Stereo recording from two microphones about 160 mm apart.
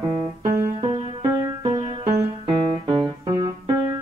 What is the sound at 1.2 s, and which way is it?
Music, 20° right (ahead or behind).